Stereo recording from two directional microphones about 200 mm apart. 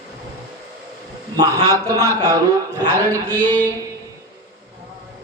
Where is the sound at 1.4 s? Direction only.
15° right (ahead or behind).